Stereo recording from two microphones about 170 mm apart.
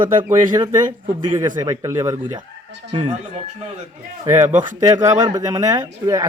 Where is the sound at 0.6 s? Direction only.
25° right (ahead or behind).